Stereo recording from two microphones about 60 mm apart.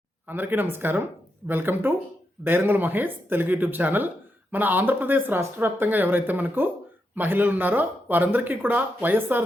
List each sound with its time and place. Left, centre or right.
0.3 s speech: right